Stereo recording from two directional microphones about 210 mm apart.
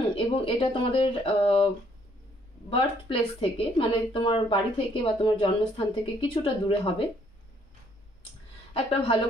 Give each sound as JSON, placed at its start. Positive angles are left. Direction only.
{"t": 0.1, "sound": "a woman's voice", "side_deg": 25}
{"t": 2.7, "sound": "a woman's voice", "side_deg": 25}
{"t": 8.7, "sound": "a woman's voice", "side_deg": 25}